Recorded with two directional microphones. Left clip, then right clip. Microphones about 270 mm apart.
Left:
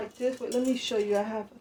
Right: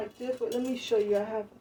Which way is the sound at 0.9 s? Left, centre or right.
Left.